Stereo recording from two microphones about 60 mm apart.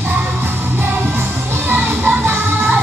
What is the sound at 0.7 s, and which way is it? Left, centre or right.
Music, right.